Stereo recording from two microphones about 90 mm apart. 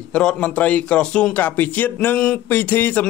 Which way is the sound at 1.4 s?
20° left (ahead or behind).